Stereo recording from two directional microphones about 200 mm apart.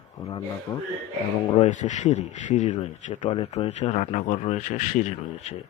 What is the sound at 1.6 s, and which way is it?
Speech, 35° left (ahead or behind).